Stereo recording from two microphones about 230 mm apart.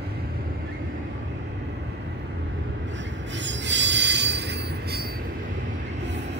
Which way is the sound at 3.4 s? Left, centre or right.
Right.